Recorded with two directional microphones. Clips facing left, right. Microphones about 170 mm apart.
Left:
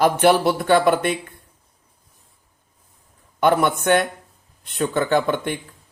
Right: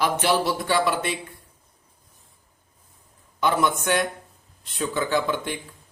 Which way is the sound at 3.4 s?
60° left (ahead or behind).